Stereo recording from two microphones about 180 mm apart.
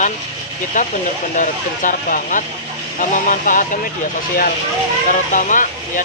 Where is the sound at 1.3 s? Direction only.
45° left (ahead or behind).